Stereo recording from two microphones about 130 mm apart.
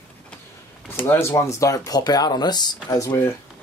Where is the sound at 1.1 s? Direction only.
20° left (ahead or behind).